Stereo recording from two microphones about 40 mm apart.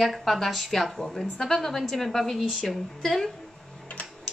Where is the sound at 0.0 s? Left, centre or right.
Centre.